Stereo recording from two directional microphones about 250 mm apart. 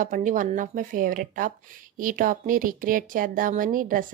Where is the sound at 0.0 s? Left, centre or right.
Right.